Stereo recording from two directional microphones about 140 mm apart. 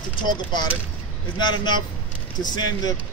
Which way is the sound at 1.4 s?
30° left (ahead or behind).